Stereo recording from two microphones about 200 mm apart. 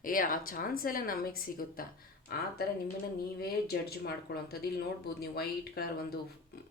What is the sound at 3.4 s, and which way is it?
A woman's voice, 50° left (ahead or behind).